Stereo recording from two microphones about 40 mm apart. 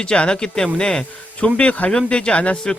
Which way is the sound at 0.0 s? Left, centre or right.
Left.